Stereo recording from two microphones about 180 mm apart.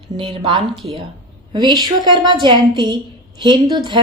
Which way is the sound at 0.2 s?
30° right (ahead or behind).